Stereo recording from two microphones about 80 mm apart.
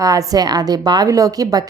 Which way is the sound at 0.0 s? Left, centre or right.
Right.